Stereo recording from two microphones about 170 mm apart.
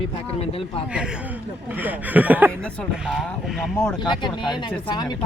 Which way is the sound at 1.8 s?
10° right (ahead or behind).